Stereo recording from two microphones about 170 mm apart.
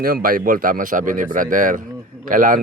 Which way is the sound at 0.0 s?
55° right (ahead or behind).